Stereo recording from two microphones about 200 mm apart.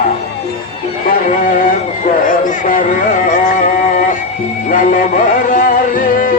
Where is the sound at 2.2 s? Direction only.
40° left (ahead or behind).